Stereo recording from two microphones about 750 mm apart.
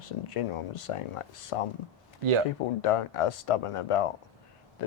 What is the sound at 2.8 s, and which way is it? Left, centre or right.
Speech, left.